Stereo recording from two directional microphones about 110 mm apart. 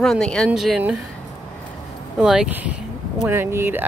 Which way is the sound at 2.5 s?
15° right (ahead or behind).